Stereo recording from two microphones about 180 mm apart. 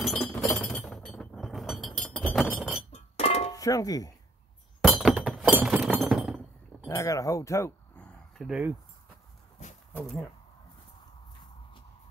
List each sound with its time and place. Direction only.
0.0 s chink: centre (ahead or behind)
2.9 s chink: 35° left (ahead or behind)
3.5 s speech: 20° left (ahead or behind)
4.8 s glass: 5° right (ahead or behind)
6.9 s a sound: 20° left (ahead or behind)
8.5 s speech: 5° right (ahead or behind)